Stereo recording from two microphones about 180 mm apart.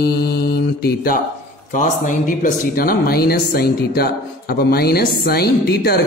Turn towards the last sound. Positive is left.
turn(degrees=60)  # may be behind; listen again after turning